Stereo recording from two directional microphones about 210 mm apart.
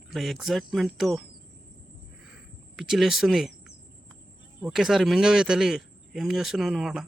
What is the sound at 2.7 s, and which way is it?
Speech, centre (ahead or behind).